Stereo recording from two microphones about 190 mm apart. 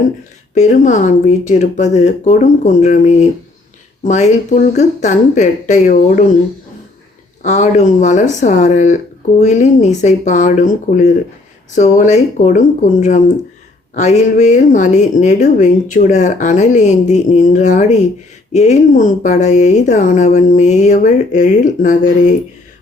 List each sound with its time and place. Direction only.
0.5 s a woman's voice: 40° left (ahead or behind)
7.4 s a woman's voice: 40° left (ahead or behind)